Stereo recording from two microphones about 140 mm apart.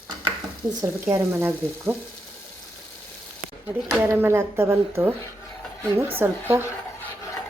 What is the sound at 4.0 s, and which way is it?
A woman's voice, 15° right (ahead or behind).